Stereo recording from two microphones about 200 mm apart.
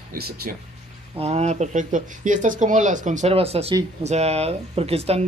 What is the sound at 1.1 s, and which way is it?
Speech, 35° right (ahead or behind).